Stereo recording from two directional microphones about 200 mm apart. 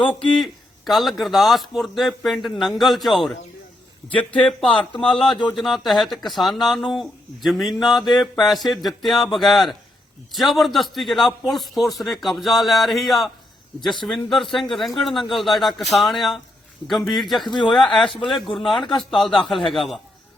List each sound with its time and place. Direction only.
0.0 s speech: 5° left (ahead or behind)
17.4 s speech: 25° left (ahead or behind)
17.7 s speech: centre (ahead or behind)